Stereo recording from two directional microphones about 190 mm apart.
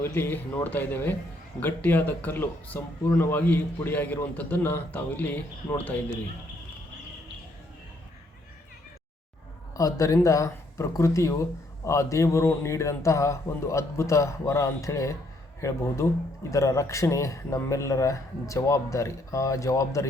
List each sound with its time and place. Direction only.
0.0 s speech: 10° left (ahead or behind)
9.7 s speech: 20° left (ahead or behind)